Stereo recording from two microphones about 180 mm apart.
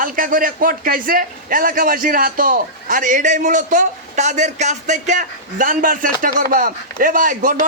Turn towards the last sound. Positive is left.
turn(degrees=-50)  # may be behind; listen again after turning